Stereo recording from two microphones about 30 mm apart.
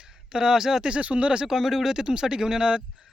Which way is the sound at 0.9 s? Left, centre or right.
Right.